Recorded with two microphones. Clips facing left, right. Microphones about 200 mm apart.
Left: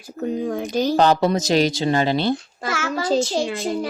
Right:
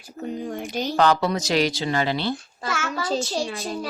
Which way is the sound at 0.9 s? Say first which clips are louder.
Left 1 dB; 20° left (ahead or behind).